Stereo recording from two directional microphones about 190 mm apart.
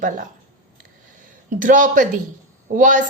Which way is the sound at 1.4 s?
45° right (ahead or behind).